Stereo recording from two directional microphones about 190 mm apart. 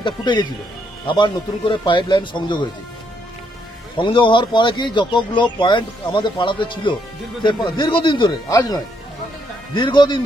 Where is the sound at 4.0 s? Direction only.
25° left (ahead or behind).